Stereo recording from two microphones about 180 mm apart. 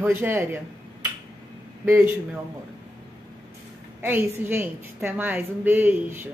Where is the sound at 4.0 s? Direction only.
10° right (ahead or behind).